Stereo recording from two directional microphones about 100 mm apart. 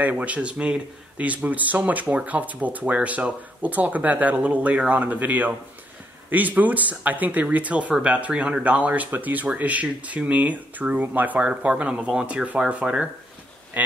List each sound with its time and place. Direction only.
0.0 s speech: 15° right (ahead or behind)
13.8 s duck: 15° right (ahead or behind)